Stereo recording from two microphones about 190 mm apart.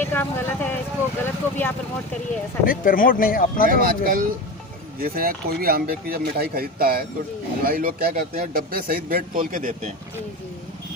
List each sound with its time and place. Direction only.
0.0 s speech: 10° left (ahead or behind)
2.6 s speech: 50° left (ahead or behind)
3.7 s a man's voice: 50° right (ahead or behind)